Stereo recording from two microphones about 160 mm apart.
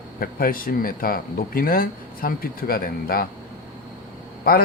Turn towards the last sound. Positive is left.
turn(degrees=70)  # may be behind; listen again after turning